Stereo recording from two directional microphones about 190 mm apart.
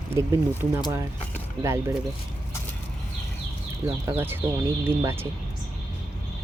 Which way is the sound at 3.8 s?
15° right (ahead or behind).